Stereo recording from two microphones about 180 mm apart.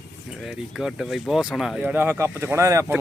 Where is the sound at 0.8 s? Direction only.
Centre (ahead or behind).